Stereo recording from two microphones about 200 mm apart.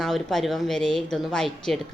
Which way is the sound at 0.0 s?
Centre (ahead or behind).